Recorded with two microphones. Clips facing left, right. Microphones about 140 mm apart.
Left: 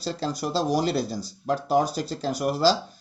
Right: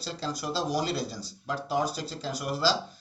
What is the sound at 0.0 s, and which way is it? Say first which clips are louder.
Speech: left 6 dB; 40° left (ahead or behind).